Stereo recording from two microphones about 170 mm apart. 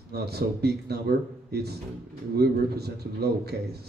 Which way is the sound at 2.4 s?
70° right (ahead or behind).